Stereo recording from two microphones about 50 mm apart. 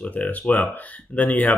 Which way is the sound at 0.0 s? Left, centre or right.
Left.